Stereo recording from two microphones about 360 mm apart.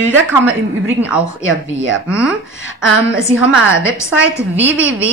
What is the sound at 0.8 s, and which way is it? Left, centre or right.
A woman's voice, centre.